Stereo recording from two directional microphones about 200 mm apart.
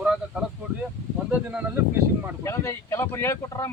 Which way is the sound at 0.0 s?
5° right (ahead or behind).